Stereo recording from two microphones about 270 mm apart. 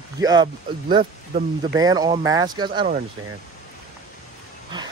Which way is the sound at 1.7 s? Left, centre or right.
Centre.